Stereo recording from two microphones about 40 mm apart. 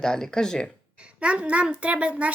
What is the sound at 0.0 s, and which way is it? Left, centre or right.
Speech, centre.